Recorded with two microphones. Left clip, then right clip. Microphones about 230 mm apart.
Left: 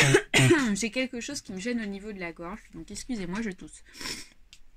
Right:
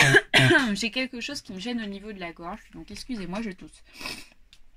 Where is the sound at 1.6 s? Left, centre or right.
Left.